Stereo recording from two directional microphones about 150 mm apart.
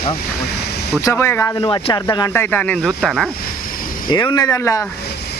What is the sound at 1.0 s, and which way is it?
Speech, 15° left (ahead or behind).